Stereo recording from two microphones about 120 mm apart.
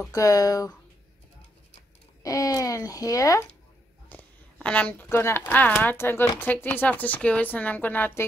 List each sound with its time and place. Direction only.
0.1 s speech: 30° left (ahead or behind)
2.2 s speech: 30° left (ahead or behind)
4.1 s a woman's voice: 10° left (ahead or behind)